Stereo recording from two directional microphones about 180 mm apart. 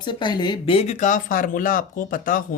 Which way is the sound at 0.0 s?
25° left (ahead or behind).